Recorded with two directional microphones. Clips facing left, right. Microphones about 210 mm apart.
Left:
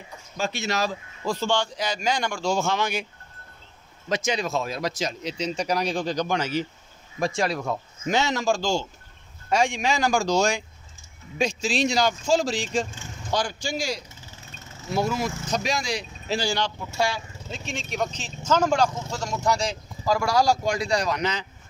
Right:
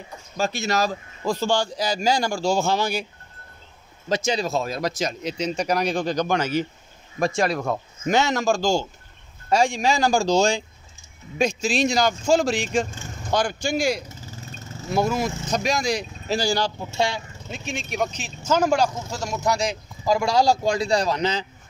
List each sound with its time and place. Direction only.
0.4 s a man's voice: 40° right (ahead or behind)
4.1 s a man's voice: 30° right (ahead or behind)
11.3 s speech: 50° right (ahead or behind)
16.9 s speech: 20° right (ahead or behind)
17.5 s speech: 10° right (ahead or behind); by 21.5 s 30° right (ahead or behind)